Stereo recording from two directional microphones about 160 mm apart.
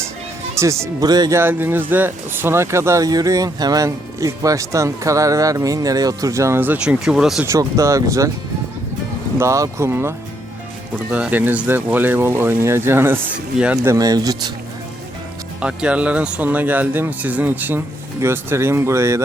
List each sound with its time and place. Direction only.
0.5 s speech: 20° right (ahead or behind)
7.4 s speech: 20° right (ahead or behind)
9.4 s speech: 20° right (ahead or behind)
13.9 s speech: 20° right (ahead or behind)
15.6 s speech: 5° right (ahead or behind)